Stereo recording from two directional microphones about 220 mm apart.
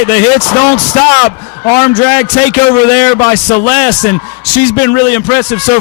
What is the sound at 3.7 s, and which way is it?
Speech, 15° left (ahead or behind).